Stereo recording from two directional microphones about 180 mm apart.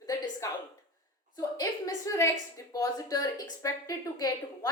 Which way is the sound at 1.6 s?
20° left (ahead or behind).